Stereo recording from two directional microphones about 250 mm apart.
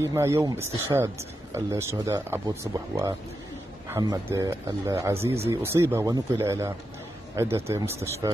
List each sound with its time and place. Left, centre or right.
0.0 s speech: centre